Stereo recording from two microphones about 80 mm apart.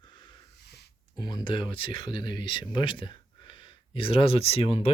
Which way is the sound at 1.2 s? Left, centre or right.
Left.